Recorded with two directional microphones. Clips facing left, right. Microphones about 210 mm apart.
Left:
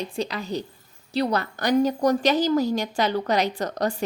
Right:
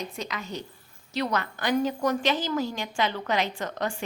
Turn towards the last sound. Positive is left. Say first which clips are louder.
# left 5 dB
turn(degrees=40)  # may be behind; listen again after turning